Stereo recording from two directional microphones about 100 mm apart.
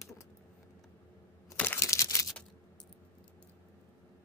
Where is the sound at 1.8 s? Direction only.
30° left (ahead or behind).